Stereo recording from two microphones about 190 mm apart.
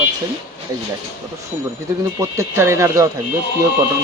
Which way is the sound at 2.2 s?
15° right (ahead or behind).